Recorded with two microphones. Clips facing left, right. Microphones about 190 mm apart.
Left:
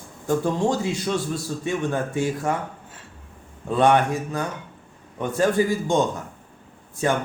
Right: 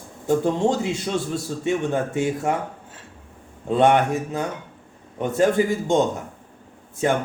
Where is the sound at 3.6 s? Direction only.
20° right (ahead or behind).